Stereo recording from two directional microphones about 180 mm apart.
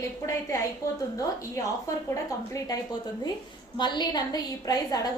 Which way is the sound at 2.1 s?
20° left (ahead or behind).